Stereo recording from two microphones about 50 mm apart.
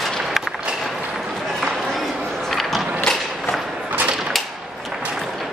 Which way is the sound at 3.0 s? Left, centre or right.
Centre.